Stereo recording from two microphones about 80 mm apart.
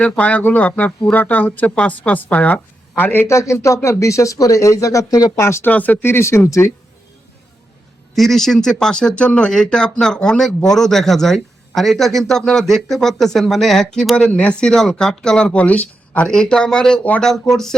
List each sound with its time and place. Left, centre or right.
0.0 s a woman's voice: centre; by 5.5 s left
5.6 s speech: left
8.1 s speech: centre